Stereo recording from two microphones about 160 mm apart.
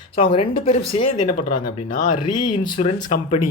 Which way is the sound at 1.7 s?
55° left (ahead or behind).